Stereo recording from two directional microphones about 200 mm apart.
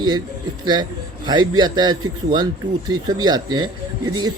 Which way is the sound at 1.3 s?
20° right (ahead or behind).